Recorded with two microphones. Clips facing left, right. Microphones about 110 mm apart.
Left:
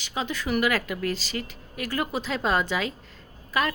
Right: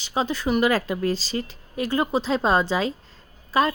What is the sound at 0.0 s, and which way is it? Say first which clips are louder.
A woman's voice: right 5 dB; 30° right (ahead or behind).